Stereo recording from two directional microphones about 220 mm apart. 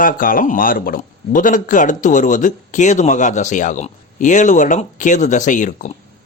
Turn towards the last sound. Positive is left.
turn(degrees=35)  # may be behind; listen again after turning